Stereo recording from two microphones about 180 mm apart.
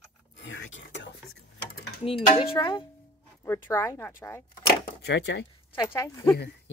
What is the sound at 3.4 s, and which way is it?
Speech, 15° left (ahead or behind).